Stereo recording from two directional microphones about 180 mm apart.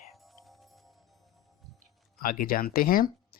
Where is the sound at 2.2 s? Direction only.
55° left (ahead or behind).